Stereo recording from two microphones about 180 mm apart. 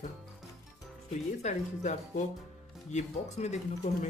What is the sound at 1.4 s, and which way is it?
Speech, 40° left (ahead or behind).